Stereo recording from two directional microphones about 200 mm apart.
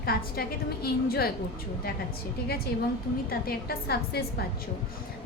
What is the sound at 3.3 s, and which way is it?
A woman's voice, 50° left (ahead or behind).